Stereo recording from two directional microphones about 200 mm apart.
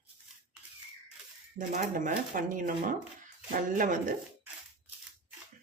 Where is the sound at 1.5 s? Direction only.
40° right (ahead or behind).